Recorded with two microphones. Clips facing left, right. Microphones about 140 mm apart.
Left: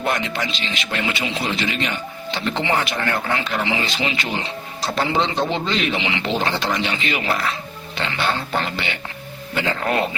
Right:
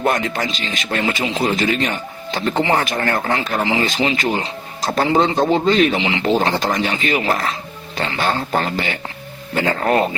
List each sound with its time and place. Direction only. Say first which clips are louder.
0.3 s speech: right 3 dB; 40° right (ahead or behind)